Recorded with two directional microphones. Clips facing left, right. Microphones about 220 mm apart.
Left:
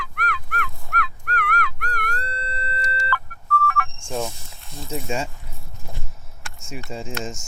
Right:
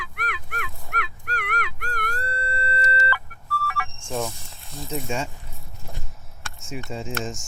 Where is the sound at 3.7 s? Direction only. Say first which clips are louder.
Left 5 dB; 10° right (ahead or behind).